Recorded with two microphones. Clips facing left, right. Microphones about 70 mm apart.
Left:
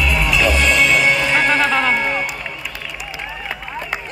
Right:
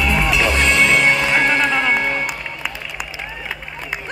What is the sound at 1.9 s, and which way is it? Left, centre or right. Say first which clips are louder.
Run: even; right.